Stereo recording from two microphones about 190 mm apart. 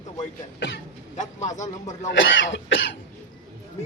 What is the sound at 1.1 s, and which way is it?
Speech, 40° left (ahead or behind).